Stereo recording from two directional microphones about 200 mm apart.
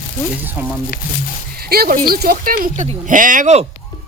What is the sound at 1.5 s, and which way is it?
Speech, 50° right (ahead or behind).